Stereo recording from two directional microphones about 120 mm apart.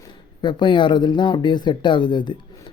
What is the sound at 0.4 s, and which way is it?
Speech, 40° left (ahead or behind).